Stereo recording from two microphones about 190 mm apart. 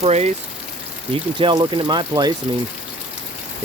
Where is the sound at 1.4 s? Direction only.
25° right (ahead or behind).